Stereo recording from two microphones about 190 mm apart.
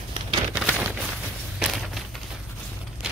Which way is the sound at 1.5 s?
Centre (ahead or behind).